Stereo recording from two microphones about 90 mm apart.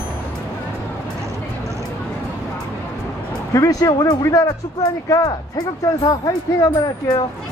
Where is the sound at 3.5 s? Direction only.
40° left (ahead or behind).